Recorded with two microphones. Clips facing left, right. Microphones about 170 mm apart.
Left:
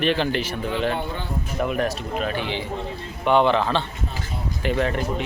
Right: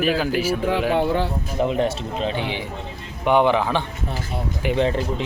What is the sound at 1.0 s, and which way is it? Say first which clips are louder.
Speech: right 9 dB; 90° right.